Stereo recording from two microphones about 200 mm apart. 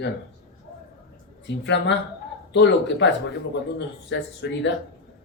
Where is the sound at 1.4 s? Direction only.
60° left (ahead or behind).